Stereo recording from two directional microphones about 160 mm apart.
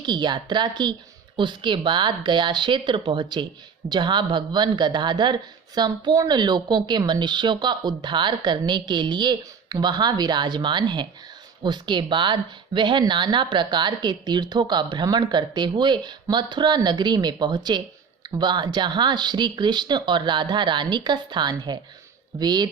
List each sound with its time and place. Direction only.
0.0 s speech: 25° right (ahead or behind)